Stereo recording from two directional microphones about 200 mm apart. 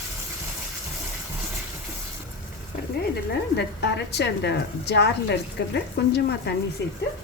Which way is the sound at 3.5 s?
60° left (ahead or behind).